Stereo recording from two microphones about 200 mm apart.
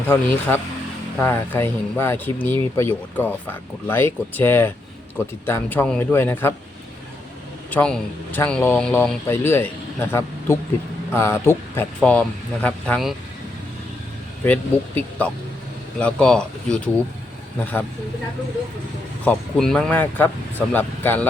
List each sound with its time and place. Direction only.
0.1 s speech: 10° left (ahead or behind)
7.7 s speech: 5° left (ahead or behind)
14.4 s speech: 10° left (ahead or behind)
19.2 s speech: 5° left (ahead or behind)